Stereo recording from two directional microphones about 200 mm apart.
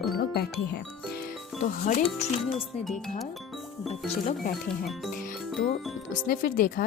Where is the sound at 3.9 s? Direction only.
30° left (ahead or behind).